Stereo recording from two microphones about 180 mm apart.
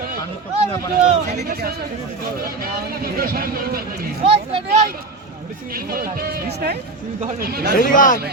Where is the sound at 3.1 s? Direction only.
55° right (ahead or behind).